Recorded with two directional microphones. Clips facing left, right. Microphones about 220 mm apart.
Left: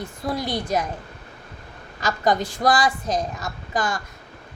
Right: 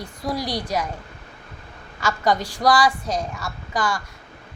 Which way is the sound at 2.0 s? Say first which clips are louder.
Even; 20° left (ahead or behind).